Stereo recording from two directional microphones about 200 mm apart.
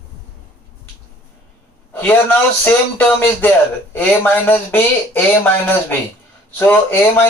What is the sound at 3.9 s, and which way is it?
Speech, 10° left (ahead or behind).